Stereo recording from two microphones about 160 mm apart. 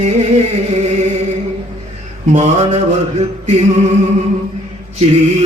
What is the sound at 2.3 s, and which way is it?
Mantra, 45° right (ahead or behind).